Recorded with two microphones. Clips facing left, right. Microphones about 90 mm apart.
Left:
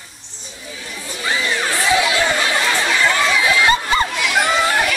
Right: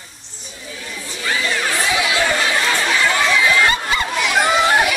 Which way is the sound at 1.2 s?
30° left (ahead or behind).